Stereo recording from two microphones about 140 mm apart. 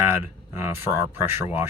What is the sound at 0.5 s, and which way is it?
Speech, 20° right (ahead or behind).